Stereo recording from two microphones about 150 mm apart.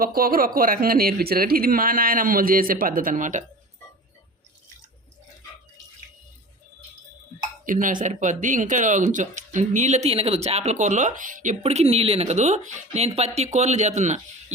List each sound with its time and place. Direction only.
0.0 s speech: 75° right (ahead or behind); by 3.4 s 60° right (ahead or behind)
7.6 s speech: 60° right (ahead or behind)
11.6 s speech: 45° right (ahead or behind)